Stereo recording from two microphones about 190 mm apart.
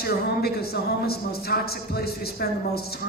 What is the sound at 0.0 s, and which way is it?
A woman's voice, 55° left (ahead or behind).